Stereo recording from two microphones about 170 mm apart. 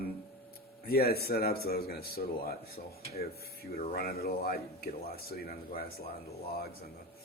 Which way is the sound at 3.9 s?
65° left (ahead or behind).